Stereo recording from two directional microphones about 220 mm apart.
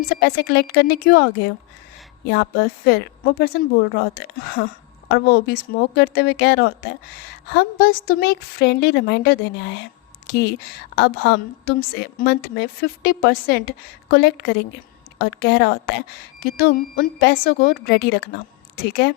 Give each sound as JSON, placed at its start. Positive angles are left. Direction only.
{"t": 0.1, "sound": "a woman's voice", "side_deg": 50}